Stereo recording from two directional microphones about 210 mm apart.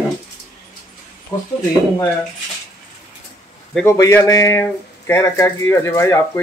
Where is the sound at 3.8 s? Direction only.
15° left (ahead or behind).